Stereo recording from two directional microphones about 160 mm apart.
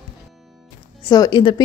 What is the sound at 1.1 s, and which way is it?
Speech, 25° left (ahead or behind).